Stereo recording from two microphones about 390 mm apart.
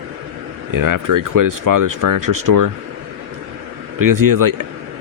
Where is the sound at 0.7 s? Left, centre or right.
Right.